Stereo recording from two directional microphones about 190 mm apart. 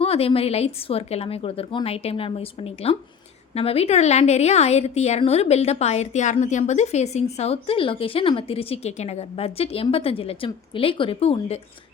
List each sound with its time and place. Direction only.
0.0 s a woman's voice: 30° left (ahead or behind)